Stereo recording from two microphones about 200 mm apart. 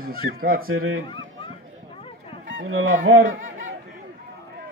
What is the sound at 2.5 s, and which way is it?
Speech, 85° right.